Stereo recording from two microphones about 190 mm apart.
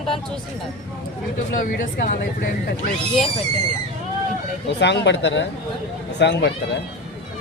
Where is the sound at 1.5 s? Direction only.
45° left (ahead or behind).